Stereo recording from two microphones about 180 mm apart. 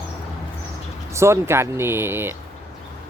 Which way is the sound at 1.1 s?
15° right (ahead or behind).